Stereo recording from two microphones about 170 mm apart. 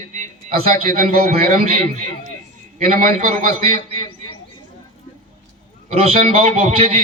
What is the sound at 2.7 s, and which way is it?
Speech, 45° right (ahead or behind).